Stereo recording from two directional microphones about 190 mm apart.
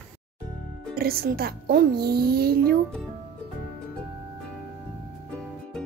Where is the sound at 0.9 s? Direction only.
55° right (ahead or behind).